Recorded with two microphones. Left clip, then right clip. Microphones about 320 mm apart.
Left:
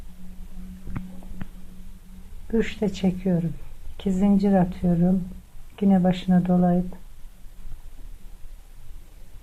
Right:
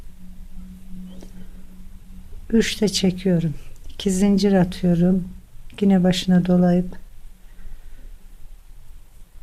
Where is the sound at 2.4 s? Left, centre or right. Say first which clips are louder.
Right 5 dB; right.